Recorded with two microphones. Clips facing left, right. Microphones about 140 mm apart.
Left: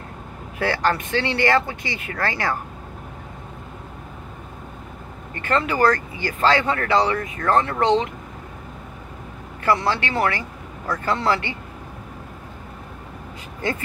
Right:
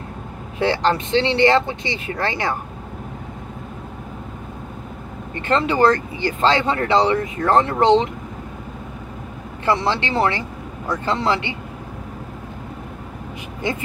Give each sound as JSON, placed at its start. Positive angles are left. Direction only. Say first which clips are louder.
{"t": 0.6, "sound": "speech", "louder": "right 3 dB", "side_deg": -25}
{"t": 5.3, "sound": "speech", "louder": "right 3 dB", "side_deg": -25}
{"t": 9.7, "sound": "speech", "louder": "right 1 dB", "side_deg": -25}